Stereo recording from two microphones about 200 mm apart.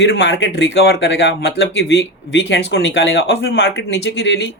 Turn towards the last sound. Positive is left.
turn(degrees=60)  # may be behind; listen again after turning